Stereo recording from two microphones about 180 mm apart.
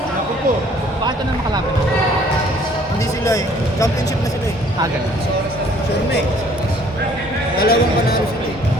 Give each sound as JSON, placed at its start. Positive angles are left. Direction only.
{"t": 3.2, "sound": "speech", "side_deg": 20}
{"t": 7.6, "sound": "a man's voice", "side_deg": 60}